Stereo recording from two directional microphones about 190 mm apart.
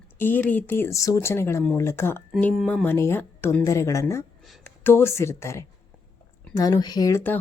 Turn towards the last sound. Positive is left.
turn(degrees=10)  # may be behind; listen again after turning